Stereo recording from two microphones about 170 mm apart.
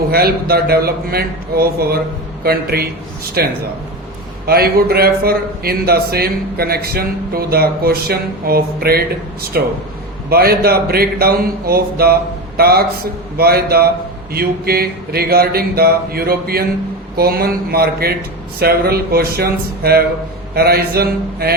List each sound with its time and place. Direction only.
0.1 s a man's voice: 65° right (ahead or behind)